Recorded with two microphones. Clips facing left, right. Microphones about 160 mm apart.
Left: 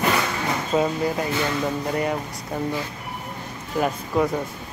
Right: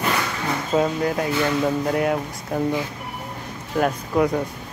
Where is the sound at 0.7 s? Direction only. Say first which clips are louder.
Right 2 dB; centre (ahead or behind).